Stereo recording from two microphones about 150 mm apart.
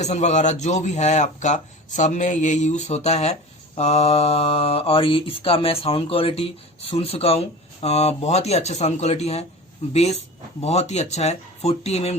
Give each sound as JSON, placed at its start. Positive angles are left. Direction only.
{"t": 0.0, "sound": "a man's voice", "side_deg": 50}
{"t": 3.8, "sound": "mantra", "side_deg": 45}
{"t": 6.9, "sound": "a man's voice", "side_deg": 40}